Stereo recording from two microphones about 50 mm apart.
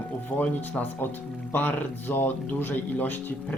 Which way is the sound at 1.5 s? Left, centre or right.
Left.